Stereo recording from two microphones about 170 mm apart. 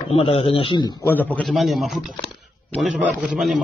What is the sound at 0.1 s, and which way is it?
Speech, 35° left (ahead or behind).